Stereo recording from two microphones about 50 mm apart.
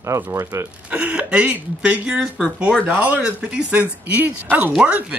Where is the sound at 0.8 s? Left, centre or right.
Right.